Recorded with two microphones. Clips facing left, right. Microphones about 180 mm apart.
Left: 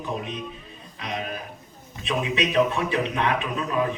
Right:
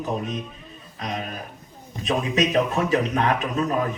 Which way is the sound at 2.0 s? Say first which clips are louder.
Right 3 dB; 40° right (ahead or behind).